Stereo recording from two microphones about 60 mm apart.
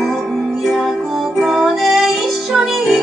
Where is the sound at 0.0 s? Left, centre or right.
Centre.